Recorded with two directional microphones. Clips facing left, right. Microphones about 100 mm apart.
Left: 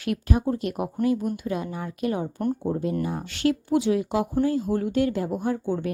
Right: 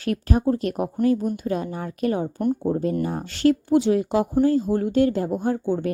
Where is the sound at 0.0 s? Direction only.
40° right (ahead or behind).